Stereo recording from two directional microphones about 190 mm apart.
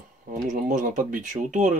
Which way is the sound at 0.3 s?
45° right (ahead or behind).